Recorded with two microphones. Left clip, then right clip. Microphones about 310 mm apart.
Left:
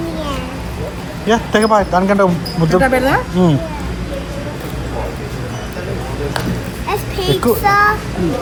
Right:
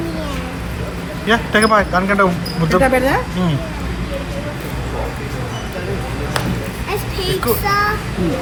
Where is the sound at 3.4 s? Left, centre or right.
Centre.